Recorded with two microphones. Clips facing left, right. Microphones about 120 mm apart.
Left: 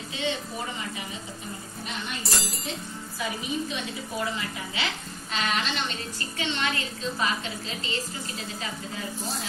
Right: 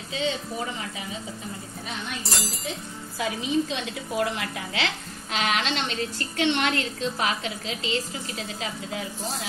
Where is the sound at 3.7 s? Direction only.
90° right.